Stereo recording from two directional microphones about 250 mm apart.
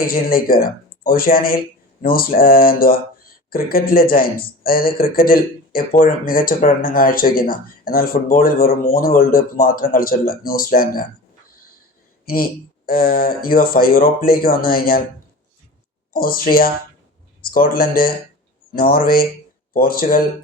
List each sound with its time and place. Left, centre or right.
0.0 s speech: left
12.2 s speech: left
16.1 s speech: left